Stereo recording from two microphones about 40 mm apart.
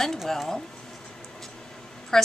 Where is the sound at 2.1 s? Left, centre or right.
Centre.